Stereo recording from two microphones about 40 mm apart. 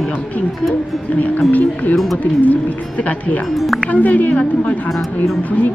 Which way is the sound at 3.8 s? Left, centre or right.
Left.